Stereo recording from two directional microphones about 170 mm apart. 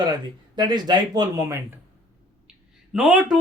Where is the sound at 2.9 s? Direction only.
5° right (ahead or behind).